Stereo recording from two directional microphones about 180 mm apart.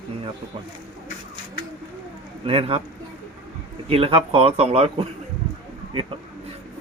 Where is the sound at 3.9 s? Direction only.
30° right (ahead or behind).